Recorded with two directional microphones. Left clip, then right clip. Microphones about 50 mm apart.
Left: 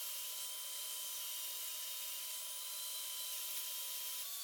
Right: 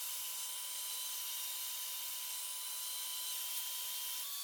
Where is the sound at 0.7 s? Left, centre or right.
Centre.